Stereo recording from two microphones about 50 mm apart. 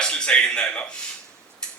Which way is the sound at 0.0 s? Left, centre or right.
Centre.